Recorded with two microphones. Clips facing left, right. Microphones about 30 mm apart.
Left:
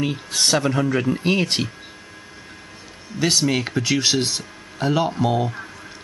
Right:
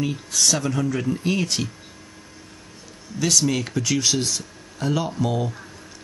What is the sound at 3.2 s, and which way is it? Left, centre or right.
Speech, left.